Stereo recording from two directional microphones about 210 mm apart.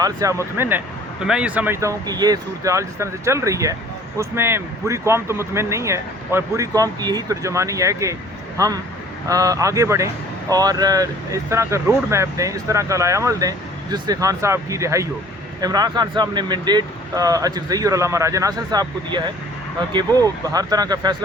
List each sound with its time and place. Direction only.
0.0 s speech: 15° right (ahead or behind)